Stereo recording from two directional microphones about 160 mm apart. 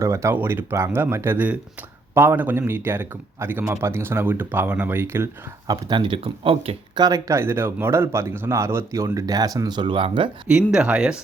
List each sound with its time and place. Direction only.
0.0 s speech: 20° right (ahead or behind)
10.4 s speech: 5° right (ahead or behind)